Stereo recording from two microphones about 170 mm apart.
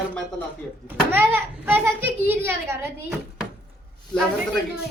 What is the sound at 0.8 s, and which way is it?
A child's voice, 10° right (ahead or behind).